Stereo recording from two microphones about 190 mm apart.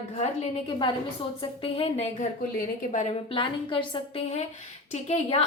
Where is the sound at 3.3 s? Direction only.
30° left (ahead or behind).